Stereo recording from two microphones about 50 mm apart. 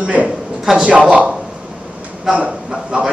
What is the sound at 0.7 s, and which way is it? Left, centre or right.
Speech, centre.